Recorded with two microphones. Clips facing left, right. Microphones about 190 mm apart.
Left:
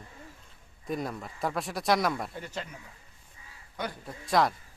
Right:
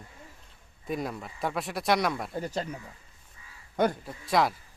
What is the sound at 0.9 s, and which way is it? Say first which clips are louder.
Speech: right 1 dB; centre (ahead or behind).